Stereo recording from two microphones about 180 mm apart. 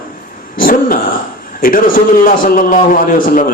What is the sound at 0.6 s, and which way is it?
A man's voice, 50° left (ahead or behind).